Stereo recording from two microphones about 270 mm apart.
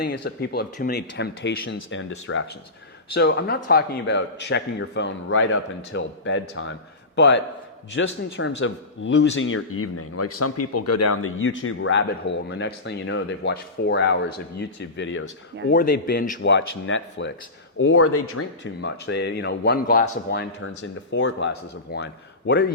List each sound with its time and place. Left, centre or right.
0.0 s speech: left
15.7 s speech: left
16.5 s speech: left